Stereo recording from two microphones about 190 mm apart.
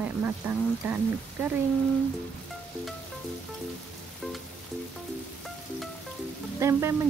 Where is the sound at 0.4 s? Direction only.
10° right (ahead or behind).